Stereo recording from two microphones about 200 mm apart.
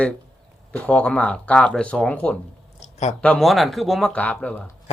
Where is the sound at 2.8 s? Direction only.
35° left (ahead or behind).